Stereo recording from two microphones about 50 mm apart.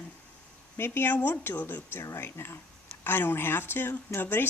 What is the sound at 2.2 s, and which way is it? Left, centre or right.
Speech, left.